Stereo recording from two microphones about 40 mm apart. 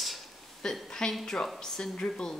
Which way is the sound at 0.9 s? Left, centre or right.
Centre.